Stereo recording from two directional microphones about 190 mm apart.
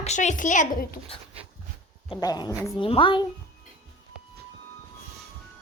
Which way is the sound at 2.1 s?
20° left (ahead or behind).